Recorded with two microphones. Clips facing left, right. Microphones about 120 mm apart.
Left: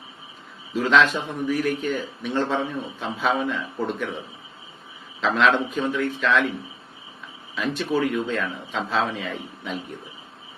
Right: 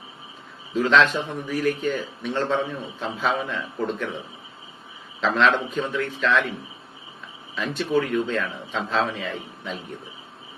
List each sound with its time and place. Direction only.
0.7 s a man's voice: centre (ahead or behind)
5.2 s a man's voice: centre (ahead or behind)
7.5 s a man's voice: centre (ahead or behind)